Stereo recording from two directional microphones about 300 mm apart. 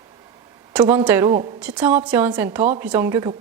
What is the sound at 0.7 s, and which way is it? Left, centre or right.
A woman's voice, centre.